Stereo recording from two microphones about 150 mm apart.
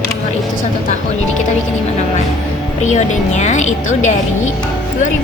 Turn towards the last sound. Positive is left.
turn(degrees=55)  # may be behind; listen again after turning